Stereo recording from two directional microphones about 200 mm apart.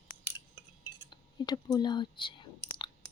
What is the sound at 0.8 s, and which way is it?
Cutlery, 20° left (ahead or behind).